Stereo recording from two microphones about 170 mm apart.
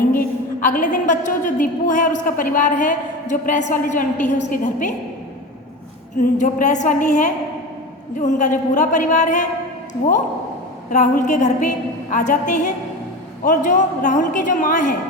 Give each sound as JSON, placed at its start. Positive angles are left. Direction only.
{"t": 0.2, "sound": "a woman's voice", "side_deg": 50}
{"t": 6.1, "sound": "a woman's voice", "side_deg": 50}
{"t": 10.9, "sound": "a woman's voice", "side_deg": 45}